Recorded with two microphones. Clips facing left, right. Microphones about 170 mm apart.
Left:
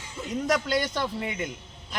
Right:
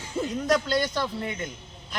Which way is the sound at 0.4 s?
15° left (ahead or behind).